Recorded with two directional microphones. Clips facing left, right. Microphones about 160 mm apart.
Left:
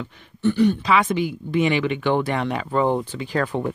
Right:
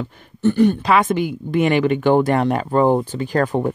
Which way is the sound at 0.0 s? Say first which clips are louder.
Right 3 dB; 45° right (ahead or behind).